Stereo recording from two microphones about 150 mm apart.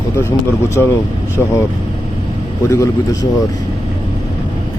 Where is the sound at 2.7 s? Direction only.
20° left (ahead or behind).